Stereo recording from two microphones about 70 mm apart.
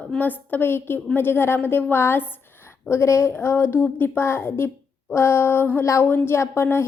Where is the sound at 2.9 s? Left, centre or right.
Left.